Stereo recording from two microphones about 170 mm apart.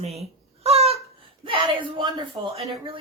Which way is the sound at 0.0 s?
40° right (ahead or behind).